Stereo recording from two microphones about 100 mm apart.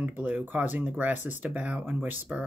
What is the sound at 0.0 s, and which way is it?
Speech, 15° right (ahead or behind).